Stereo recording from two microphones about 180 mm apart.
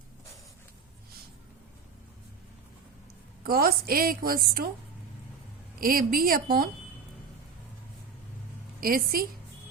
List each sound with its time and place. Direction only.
3.4 s a woman's voice: 55° right (ahead or behind)
5.8 s a woman's voice: 55° right (ahead or behind)
8.8 s a woman's voice: 55° right (ahead or behind)